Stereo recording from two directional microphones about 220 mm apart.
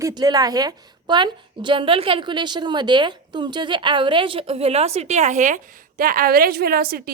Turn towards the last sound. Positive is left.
turn(degrees=-40)  # may be behind; listen again after turning